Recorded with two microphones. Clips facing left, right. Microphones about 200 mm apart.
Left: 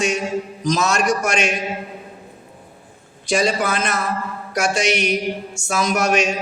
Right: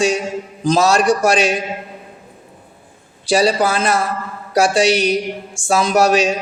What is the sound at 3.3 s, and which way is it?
A man's voice, 35° right (ahead or behind).